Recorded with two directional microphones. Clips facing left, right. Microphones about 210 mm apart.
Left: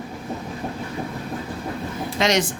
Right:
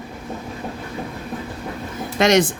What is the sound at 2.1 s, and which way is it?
Speech, 55° right (ahead or behind).